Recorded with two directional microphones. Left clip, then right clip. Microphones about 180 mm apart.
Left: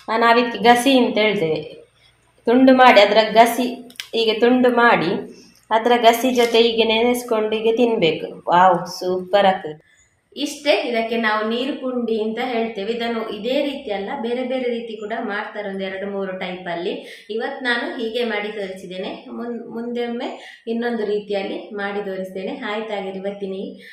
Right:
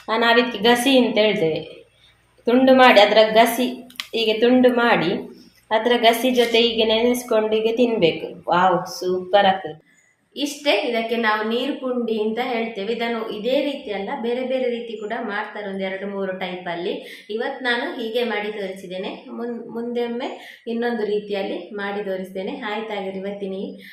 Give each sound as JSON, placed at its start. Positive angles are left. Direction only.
{"t": 0.1, "sound": "a woman's voice", "side_deg": 5}
{"t": 2.4, "sound": "speech", "side_deg": 5}
{"t": 10.3, "sound": "a woman's voice", "side_deg": -5}